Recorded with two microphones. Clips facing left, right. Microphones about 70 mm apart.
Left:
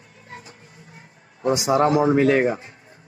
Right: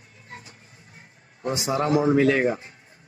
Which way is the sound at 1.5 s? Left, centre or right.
Left.